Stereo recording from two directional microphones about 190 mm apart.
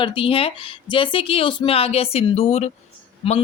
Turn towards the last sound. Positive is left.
turn(degrees=30)  # may be behind; listen again after turning